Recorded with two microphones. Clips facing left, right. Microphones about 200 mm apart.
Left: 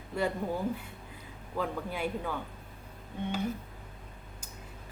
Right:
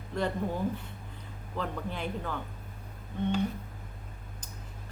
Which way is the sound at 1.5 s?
10° left (ahead or behind).